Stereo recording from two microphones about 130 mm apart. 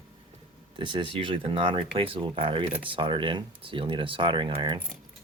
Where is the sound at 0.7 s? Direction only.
40° right (ahead or behind).